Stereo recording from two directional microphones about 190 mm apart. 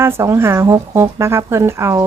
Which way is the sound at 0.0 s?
15° right (ahead or behind).